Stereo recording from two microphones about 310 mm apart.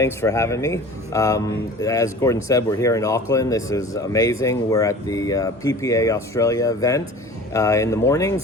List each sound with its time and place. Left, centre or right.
0.0 s speech: centre